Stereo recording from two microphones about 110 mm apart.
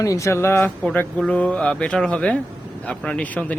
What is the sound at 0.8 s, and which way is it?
Speech, 10° left (ahead or behind).